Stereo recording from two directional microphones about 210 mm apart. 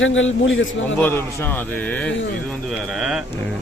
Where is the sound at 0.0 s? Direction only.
65° left (ahead or behind).